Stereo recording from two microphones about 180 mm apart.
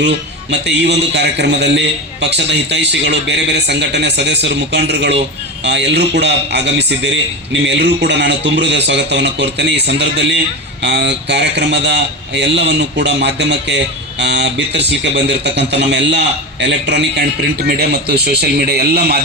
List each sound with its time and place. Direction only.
0.0 s speech: 75° right (ahead or behind)